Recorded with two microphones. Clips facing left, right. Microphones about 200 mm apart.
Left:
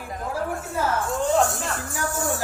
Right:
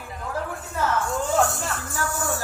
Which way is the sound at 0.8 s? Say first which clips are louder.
Even; centre (ahead or behind).